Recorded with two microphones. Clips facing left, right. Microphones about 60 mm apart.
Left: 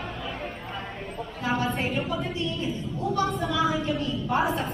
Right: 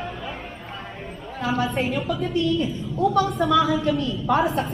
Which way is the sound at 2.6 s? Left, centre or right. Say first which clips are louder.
Right 7 dB; right.